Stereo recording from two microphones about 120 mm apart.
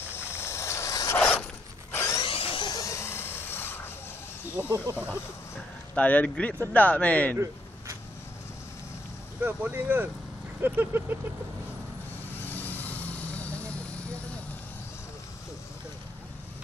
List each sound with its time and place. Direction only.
0.3 s zipper: 20° left (ahead or behind)
1.4 s wood: 20° left (ahead or behind)
2.2 s a sound: 50° left (ahead or behind)
2.7 s a sound: 25° left (ahead or behind)
4.6 s speech: 15° right (ahead or behind)
5.9 s speech: 10° left (ahead or behind)
9.4 s speech: 15° right (ahead or behind)
12.4 s vehicle: 15° left (ahead or behind)